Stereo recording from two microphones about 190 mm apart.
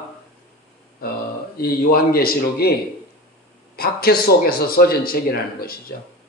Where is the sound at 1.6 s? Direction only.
50° left (ahead or behind).